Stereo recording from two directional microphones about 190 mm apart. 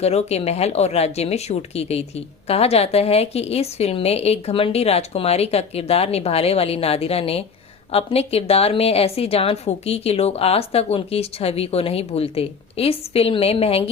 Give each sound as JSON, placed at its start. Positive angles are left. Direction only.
{"t": 0.0, "sound": "speech", "side_deg": 35}